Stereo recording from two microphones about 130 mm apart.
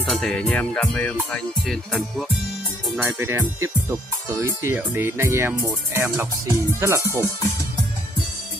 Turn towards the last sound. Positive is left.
turn(degrees=-20)  # may be behind; listen again after turning